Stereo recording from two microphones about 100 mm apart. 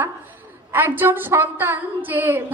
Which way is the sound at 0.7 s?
20° right (ahead or behind).